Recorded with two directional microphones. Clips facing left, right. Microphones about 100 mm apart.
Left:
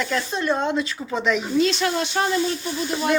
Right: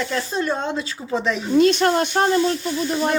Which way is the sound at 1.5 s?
50° right (ahead or behind).